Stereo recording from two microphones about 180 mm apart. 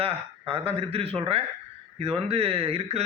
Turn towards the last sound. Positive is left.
turn(degrees=-35)  # may be behind; listen again after turning